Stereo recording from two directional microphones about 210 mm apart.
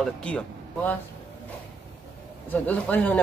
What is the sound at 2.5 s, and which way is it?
Speech, 10° left (ahead or behind).